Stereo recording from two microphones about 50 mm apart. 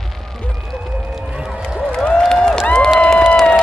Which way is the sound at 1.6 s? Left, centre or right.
Centre.